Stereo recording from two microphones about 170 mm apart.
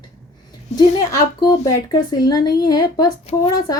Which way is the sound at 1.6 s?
20° left (ahead or behind).